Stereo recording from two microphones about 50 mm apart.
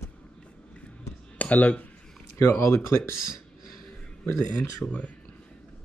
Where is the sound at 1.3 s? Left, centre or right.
Left.